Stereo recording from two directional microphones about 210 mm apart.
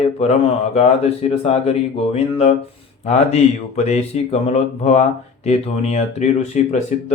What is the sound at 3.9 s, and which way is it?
Mantra, 30° left (ahead or behind).